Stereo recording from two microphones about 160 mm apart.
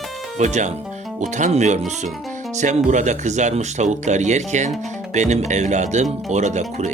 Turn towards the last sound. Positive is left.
turn(degrees=-45)  # may be behind; listen again after turning